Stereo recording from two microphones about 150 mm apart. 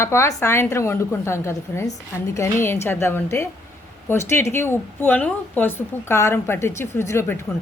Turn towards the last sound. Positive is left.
turn(degrees=15)  # may be behind; listen again after turning